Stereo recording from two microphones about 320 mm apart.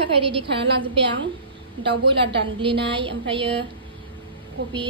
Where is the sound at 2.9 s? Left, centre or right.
Centre.